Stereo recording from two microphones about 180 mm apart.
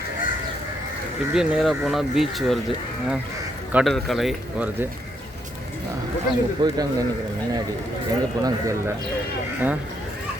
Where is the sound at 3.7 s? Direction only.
Centre (ahead or behind).